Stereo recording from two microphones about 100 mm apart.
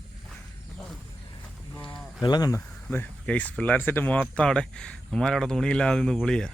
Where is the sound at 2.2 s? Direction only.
40° left (ahead or behind).